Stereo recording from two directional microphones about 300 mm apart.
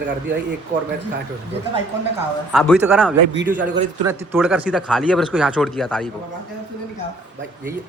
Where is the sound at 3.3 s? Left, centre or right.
Right.